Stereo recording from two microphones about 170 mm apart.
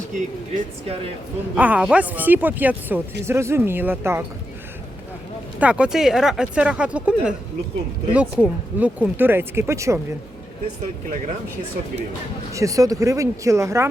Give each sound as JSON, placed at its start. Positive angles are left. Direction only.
{"t": 0.1, "sound": "speech", "side_deg": -50}
{"t": 1.5, "sound": "speech", "side_deg": -10}
{"t": 5.5, "sound": "speech", "side_deg": -5}
{"t": 12.5, "sound": "speech", "side_deg": -20}